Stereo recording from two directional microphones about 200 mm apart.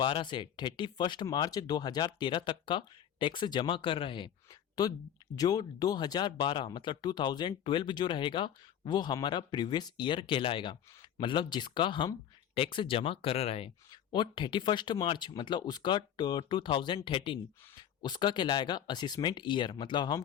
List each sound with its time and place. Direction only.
0.0 s speech: 25° left (ahead or behind)